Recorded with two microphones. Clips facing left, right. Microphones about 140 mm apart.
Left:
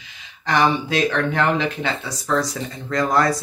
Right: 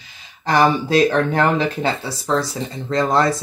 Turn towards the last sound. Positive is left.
turn(degrees=-25)  # may be behind; listen again after turning